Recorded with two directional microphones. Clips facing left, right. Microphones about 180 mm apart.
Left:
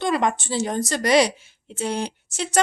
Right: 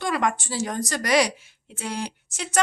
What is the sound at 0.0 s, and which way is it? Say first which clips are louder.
A woman's voice: left 3 dB; 25° left (ahead or behind).